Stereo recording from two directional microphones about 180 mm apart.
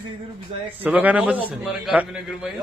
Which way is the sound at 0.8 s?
10° right (ahead or behind).